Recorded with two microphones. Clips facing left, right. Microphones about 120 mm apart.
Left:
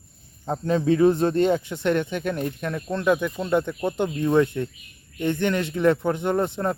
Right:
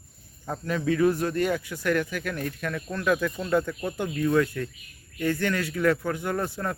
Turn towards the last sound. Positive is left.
turn(degrees=25)  # may be behind; listen again after turning